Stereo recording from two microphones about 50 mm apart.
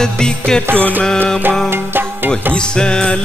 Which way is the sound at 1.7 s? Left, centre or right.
Right.